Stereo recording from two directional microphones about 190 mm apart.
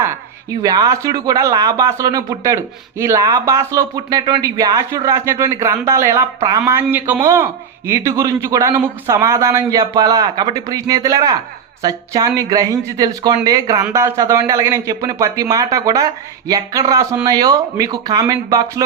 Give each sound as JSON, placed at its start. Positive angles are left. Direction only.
{"t": 0.6, "sound": "speech", "side_deg": -20}